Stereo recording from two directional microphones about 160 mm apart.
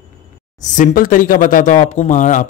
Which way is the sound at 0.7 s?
60° left (ahead or behind).